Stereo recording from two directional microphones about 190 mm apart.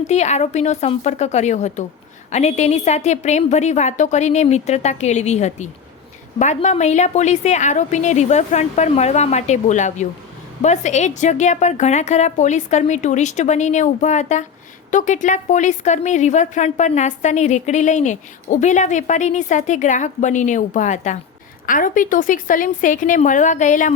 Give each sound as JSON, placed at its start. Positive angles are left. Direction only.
{"t": 0.1, "sound": "a woman's voice", "side_deg": 35}